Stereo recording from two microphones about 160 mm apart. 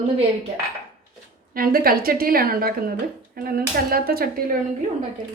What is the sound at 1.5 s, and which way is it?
A woman's voice, 65° right (ahead or behind).